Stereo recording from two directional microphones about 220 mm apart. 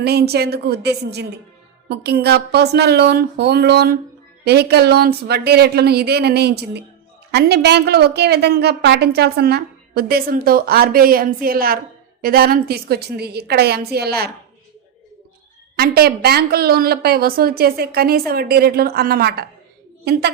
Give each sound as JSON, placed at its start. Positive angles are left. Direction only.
{"t": 0.0, "sound": "a woman's voice", "side_deg": -45}
{"t": 15.7, "sound": "a woman's voice", "side_deg": -45}